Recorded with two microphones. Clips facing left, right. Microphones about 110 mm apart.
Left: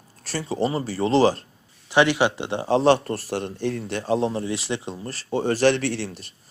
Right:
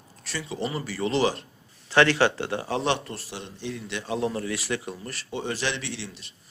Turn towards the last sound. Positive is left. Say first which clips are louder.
# left 9 dB
turn(degrees=45)  # may be behind; listen again after turning